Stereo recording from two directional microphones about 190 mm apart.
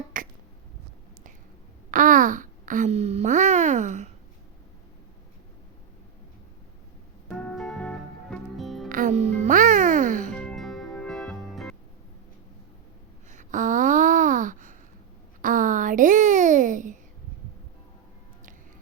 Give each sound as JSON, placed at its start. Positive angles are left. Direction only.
{"t": 0.1, "sound": "finger snapping", "side_deg": -45}
{"t": 1.9, "sound": "a sound", "side_deg": -45}
{"t": 7.3, "sound": "music", "side_deg": 5}
{"t": 8.9, "sound": "music", "side_deg": -45}
{"t": 10.3, "sound": "music", "side_deg": 0}
{"t": 13.3, "sound": "a sound", "side_deg": -40}